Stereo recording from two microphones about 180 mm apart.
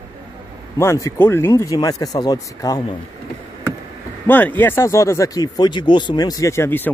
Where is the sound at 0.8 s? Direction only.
15° left (ahead or behind).